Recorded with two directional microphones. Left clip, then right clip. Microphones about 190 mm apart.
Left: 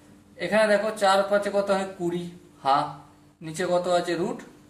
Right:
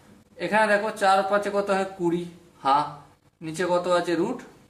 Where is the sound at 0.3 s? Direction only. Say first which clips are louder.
Even; 25° right (ahead or behind).